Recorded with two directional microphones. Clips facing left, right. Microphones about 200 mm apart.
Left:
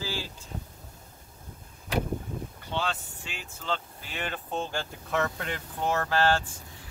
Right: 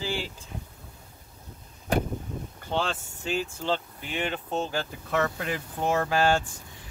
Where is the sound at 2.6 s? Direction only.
50° right (ahead or behind); by 3.8 s 30° right (ahead or behind).